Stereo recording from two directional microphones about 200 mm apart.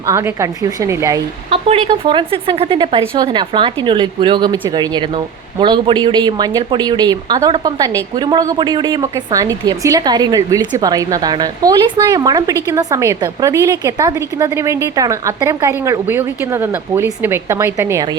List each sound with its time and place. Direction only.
0.0 s a woman's voice: 15° right (ahead or behind)
1.5 s a woman's voice: 30° right (ahead or behind)